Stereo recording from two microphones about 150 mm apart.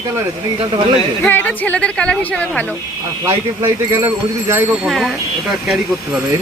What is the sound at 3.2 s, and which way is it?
Speech, 20° right (ahead or behind).